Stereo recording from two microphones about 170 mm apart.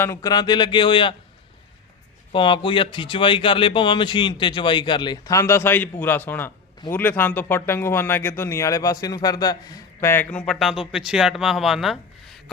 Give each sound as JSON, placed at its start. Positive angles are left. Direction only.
{"t": 0.0, "sound": "speech", "side_deg": 20}
{"t": 2.3, "sound": "speech", "side_deg": 30}